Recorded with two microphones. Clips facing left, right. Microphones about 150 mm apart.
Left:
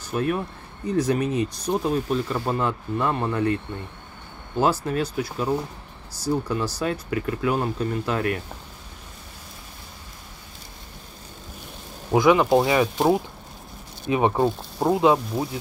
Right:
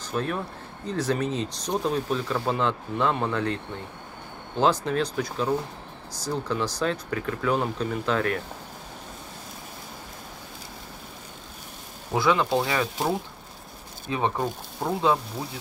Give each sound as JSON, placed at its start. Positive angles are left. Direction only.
{"t": 0.1, "sound": "speech", "side_deg": 5}
{"t": 12.1, "sound": "speech", "side_deg": 15}